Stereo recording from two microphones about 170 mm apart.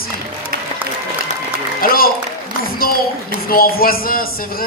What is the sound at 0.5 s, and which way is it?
Music, 65° right (ahead or behind).